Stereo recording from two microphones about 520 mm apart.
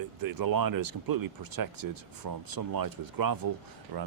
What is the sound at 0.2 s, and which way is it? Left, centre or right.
Speech, right.